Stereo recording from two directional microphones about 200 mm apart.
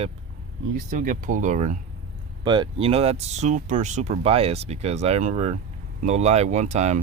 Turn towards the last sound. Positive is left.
turn(degrees=-35)  # may be behind; listen again after turning